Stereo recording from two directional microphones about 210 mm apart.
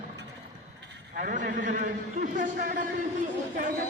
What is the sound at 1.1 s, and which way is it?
A man's voice, 40° right (ahead or behind).